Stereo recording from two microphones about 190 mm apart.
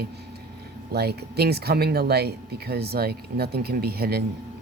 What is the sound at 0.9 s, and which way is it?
Speech, 55° right (ahead or behind).